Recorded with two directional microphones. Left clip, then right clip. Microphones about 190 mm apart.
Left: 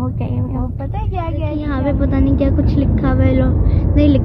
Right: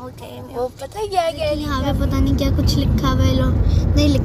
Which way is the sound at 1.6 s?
5° left (ahead or behind).